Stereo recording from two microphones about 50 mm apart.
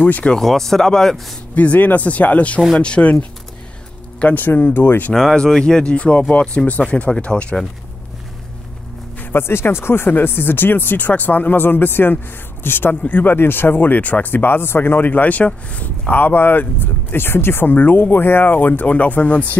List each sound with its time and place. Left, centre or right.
0.0 s speech: left
0.4 s speech: centre
1.5 s speech: left
5.1 s speech: centre
9.2 s speech: left
16.1 s speech: left
17.7 s speech: left